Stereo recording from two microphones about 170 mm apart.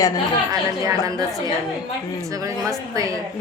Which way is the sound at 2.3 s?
20° right (ahead or behind).